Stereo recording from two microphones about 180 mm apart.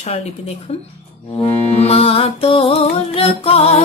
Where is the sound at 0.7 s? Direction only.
35° left (ahead or behind).